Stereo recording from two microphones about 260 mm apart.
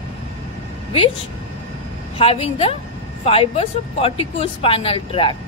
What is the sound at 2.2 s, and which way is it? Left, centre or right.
A woman's voice, left.